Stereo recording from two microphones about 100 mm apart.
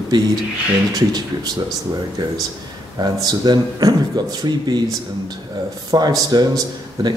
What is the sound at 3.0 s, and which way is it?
A man's voice, 45° right (ahead or behind).